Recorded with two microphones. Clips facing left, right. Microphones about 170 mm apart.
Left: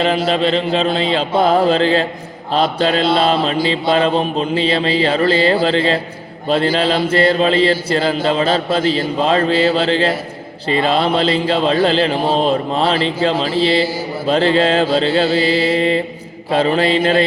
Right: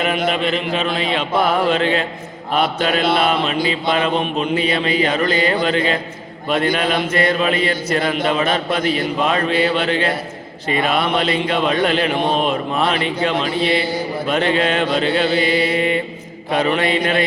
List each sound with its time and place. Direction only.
0.0 s mantra: 30° left (ahead or behind)
6.5 s speech: 30° left (ahead or behind)